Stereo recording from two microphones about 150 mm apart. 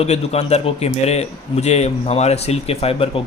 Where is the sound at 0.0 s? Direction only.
45° left (ahead or behind).